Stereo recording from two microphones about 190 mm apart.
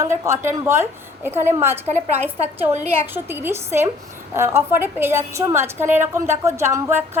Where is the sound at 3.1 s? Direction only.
10° right (ahead or behind).